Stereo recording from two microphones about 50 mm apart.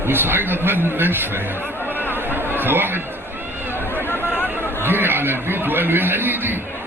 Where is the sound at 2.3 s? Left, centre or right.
Right.